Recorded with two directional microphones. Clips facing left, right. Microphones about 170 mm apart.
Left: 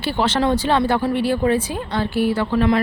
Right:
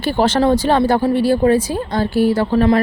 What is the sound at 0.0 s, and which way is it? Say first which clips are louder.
Speech: right 4 dB; 45° right (ahead or behind).